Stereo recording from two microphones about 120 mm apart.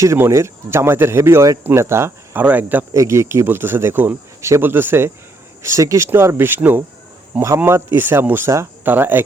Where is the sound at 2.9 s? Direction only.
25° right (ahead or behind).